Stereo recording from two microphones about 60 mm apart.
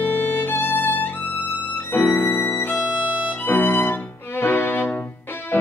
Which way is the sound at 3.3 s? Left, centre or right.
Left.